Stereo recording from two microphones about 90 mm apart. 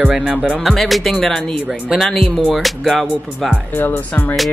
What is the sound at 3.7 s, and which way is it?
Speech, 25° left (ahead or behind).